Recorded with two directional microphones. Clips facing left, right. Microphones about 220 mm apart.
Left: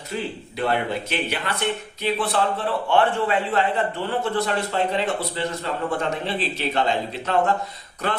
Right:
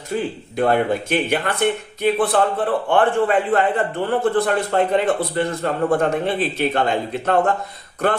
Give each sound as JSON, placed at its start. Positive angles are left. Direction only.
{"t": 0.1, "sound": "speech", "side_deg": -50}